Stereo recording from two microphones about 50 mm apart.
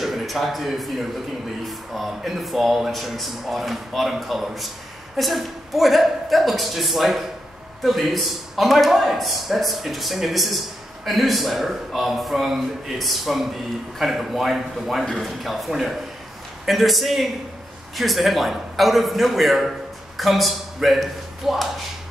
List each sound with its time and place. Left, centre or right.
0.0 s a man's voice: centre